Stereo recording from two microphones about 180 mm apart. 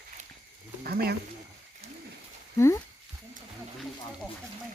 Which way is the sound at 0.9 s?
60° right (ahead or behind).